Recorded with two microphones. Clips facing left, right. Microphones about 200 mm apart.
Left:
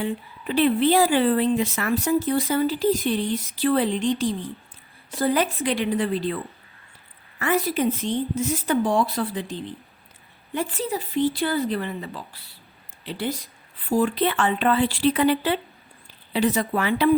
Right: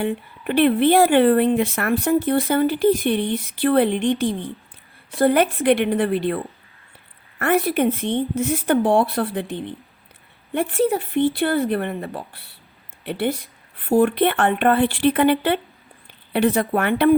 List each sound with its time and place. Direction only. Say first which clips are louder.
0.0 s speech: right 4 dB; 60° right (ahead or behind)